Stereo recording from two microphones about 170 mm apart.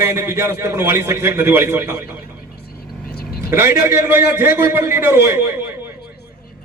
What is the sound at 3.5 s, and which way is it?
A man's voice, 15° right (ahead or behind).